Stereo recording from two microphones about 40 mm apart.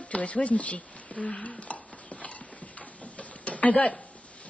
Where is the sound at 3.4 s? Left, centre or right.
Left.